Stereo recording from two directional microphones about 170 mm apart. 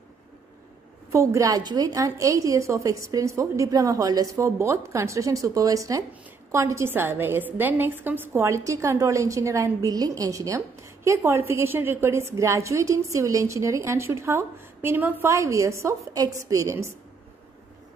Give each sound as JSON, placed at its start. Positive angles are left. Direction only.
{"t": 1.1, "sound": "a woman's voice", "side_deg": -15}